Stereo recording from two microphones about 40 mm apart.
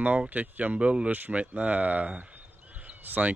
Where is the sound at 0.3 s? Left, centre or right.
Right.